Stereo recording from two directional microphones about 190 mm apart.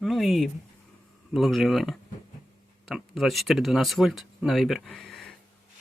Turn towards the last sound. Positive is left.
turn(degrees=0)  # may be behind; listen again after turning